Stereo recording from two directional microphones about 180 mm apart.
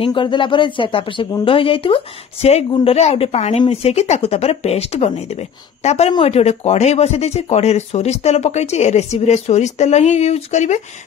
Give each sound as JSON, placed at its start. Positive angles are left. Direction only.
{"t": 0.0, "sound": "speech", "side_deg": 30}